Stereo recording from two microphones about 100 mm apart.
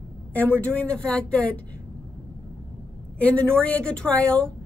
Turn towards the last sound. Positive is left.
turn(degrees=10)  # may be behind; listen again after turning